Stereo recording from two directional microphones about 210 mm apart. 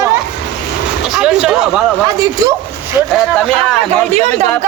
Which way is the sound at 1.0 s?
5° right (ahead or behind).